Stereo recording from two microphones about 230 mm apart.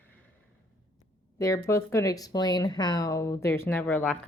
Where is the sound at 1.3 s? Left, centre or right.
Centre.